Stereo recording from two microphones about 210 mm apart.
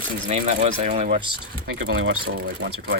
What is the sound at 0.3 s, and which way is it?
Speech, 30° right (ahead or behind).